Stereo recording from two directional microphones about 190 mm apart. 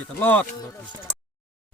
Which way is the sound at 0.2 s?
10° left (ahead or behind).